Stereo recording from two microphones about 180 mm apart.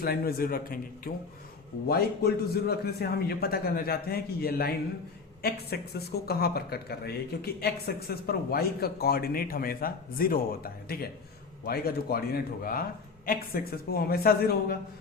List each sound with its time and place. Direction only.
0.0 s a man's voice: 55° left (ahead or behind)